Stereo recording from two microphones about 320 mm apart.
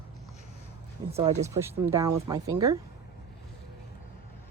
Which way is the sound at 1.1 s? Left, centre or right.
Centre.